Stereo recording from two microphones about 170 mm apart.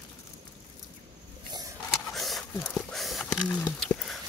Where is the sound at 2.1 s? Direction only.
Centre (ahead or behind).